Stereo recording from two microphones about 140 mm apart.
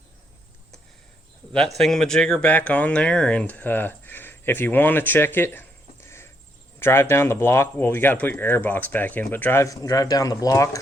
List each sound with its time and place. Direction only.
1.5 s speech: 5° left (ahead or behind); by 10.8 s 25° left (ahead or behind)